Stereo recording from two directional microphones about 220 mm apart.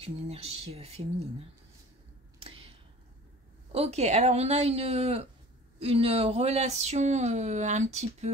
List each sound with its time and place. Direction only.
0.0 s a woman's voice: 30° right (ahead or behind)
3.7 s a woman's voice: 30° right (ahead or behind)